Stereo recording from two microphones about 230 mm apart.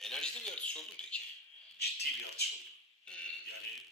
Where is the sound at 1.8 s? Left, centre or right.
Left.